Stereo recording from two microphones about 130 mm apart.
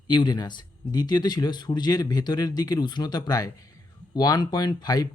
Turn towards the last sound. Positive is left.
turn(degrees=30)  # may be behind; listen again after turning